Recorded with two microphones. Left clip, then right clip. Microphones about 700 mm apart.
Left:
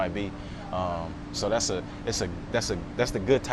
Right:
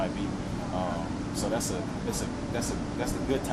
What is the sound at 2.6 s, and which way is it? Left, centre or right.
Speech, left.